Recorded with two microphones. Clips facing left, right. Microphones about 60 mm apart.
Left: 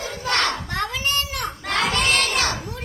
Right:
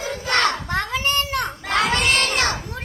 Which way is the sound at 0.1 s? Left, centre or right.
Right.